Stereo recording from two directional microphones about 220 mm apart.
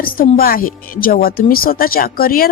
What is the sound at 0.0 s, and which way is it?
A woman's voice, 40° left (ahead or behind).